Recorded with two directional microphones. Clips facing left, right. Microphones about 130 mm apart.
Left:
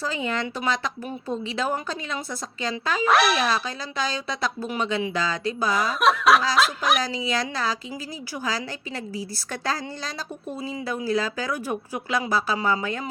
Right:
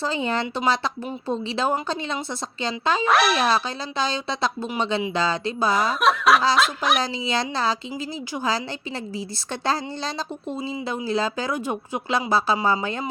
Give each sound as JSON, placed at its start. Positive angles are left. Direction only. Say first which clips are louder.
{"t": 0.0, "sound": "speech", "louder": "right 3 dB", "side_deg": -30}
{"t": 3.0, "sound": "speech", "louder": "left 1 dB", "side_deg": 0}
{"t": 3.5, "sound": "speech", "louder": "right 3 dB", "side_deg": -30}
{"t": 5.7, "sound": "speech", "louder": "even", "side_deg": 0}
{"t": 7.0, "sound": "speech", "louder": "right 1 dB", "side_deg": -25}
{"t": 9.1, "sound": "speech", "louder": "right 2 dB", "side_deg": -25}